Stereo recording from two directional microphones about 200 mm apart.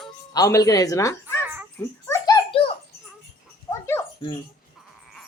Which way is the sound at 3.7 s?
10° left (ahead or behind).